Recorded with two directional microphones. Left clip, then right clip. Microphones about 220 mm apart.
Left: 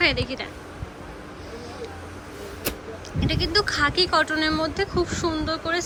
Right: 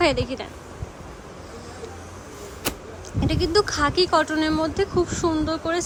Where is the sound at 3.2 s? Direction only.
20° right (ahead or behind).